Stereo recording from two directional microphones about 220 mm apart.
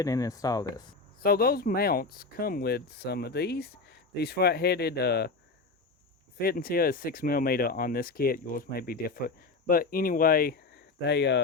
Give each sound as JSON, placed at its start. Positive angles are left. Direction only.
{"t": 0.0, "sound": "speech", "side_deg": 15}
{"t": 1.2, "sound": "speech", "side_deg": 45}
{"t": 6.4, "sound": "speech", "side_deg": 45}